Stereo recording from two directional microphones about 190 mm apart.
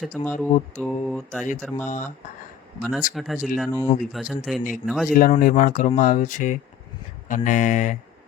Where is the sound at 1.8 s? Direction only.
40° left (ahead or behind).